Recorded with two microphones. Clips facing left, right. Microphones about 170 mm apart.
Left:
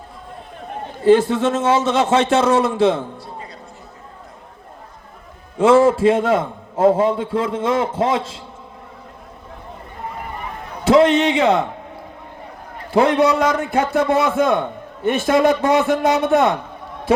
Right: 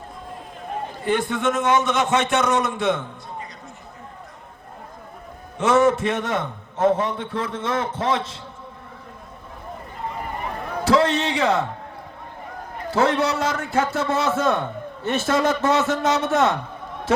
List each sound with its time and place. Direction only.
1.0 s a man's voice: 30° left (ahead or behind)
5.6 s a man's voice: 30° left (ahead or behind)
10.8 s a man's voice: 20° left (ahead or behind)
12.9 s a man's voice: 15° left (ahead or behind)